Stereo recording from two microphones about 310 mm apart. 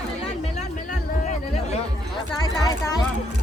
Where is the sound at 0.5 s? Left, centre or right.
Left.